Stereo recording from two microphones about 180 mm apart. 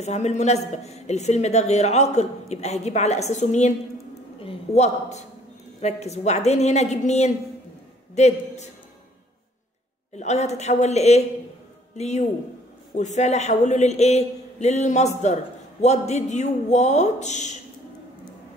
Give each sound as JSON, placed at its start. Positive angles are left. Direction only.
{"t": 0.0, "sound": "a man's voice", "side_deg": 40}
{"t": 10.1, "sound": "a man's voice", "side_deg": 40}